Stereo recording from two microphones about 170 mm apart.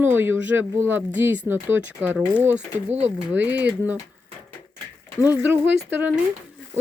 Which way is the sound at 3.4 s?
10° right (ahead or behind).